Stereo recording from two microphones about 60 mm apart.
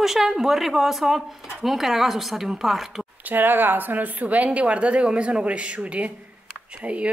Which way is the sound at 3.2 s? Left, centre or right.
Right.